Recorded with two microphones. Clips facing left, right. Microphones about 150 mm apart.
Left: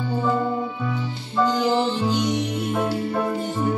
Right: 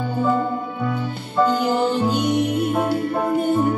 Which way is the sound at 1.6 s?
55° right (ahead or behind).